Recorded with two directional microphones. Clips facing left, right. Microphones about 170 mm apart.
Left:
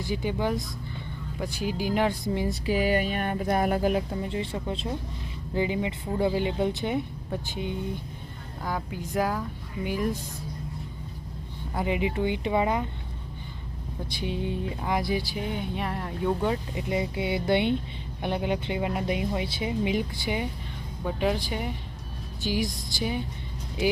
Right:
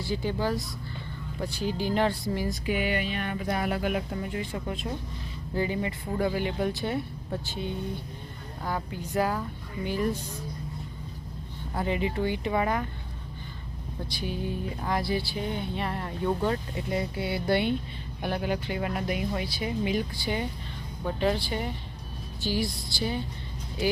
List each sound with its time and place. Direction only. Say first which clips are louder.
0.1 s speech: left 1 dB; 15° left (ahead or behind)
2.2 s speech: left 2 dB; 20° left (ahead or behind)
2.6 s speech: left 5 dB; 35° left (ahead or behind)
5.5 s speech: left 2 dB; 15° left (ahead or behind)
11.8 s speech: left 1 dB; 15° left (ahead or behind)
14.2 s speech: left 2 dB; 25° left (ahead or behind); by 16.6 s 5° left (ahead or behind)
16.9 s speech: left 2 dB; 20° left (ahead or behind)